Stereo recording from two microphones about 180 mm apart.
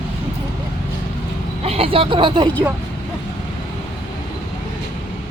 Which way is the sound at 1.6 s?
35° right (ahead or behind).